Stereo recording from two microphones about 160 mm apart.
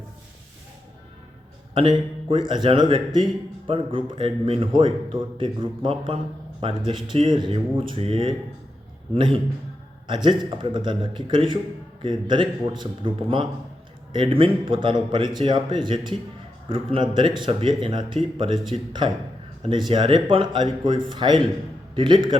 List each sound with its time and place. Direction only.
1.7 s speech: 30° right (ahead or behind)